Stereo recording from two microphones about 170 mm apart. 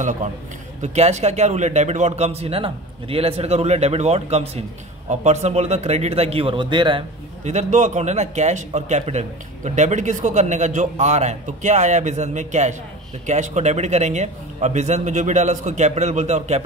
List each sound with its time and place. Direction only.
0.9 s speech: 40° right (ahead or behind)
7.4 s a man's voice: 45° right (ahead or behind)